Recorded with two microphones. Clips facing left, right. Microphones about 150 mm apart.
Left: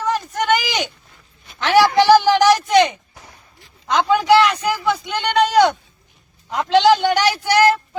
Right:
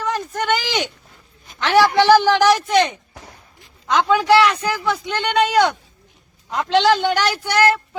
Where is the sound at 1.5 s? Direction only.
Centre (ahead or behind).